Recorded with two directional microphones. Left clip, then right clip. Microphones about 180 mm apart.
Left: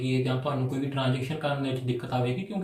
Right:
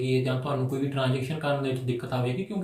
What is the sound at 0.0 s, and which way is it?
Speech, 15° right (ahead or behind).